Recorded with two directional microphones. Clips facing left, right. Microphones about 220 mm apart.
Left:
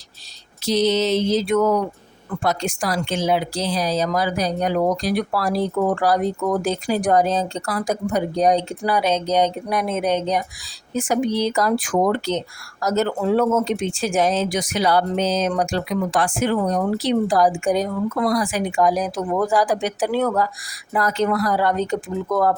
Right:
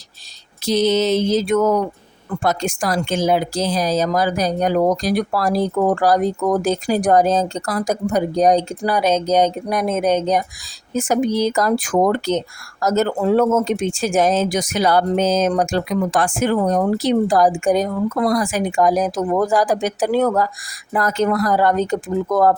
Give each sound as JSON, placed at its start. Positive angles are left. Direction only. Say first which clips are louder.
{"t": 0.6, "sound": "speech", "louder": "right 2 dB", "side_deg": -50}